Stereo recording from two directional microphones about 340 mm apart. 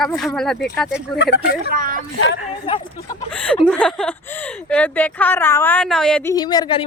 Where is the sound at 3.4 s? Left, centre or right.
Centre.